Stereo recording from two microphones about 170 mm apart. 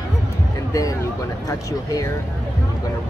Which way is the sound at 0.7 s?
20° left (ahead or behind).